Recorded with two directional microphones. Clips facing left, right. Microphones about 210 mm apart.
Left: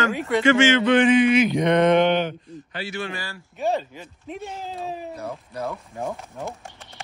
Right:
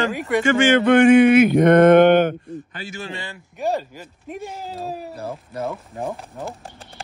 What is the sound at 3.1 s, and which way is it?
Speech, 20° right (ahead or behind).